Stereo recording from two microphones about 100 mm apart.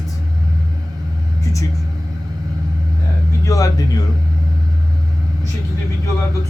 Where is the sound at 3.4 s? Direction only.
35° left (ahead or behind).